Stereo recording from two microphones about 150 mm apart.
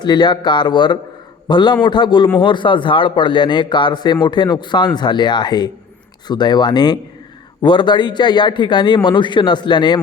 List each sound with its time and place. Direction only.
0.0 s a man's voice: 30° left (ahead or behind)